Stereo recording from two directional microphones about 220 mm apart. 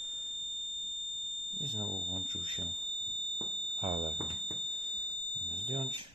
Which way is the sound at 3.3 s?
25° right (ahead or behind).